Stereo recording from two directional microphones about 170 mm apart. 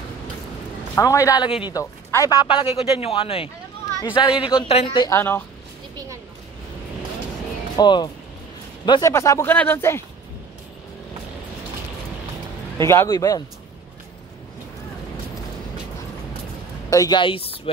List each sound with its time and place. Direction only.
0.9 s a man's voice: 20° left (ahead or behind)
2.4 s a man's voice: 30° left (ahead or behind)
5.1 s speech: 15° left (ahead or behind)
7.7 s a man's voice: 25° left (ahead or behind)
9.1 s speech: 15° left (ahead or behind)
12.8 s speech: 15° left (ahead or behind)
16.9 s a man's voice: 25° left (ahead or behind)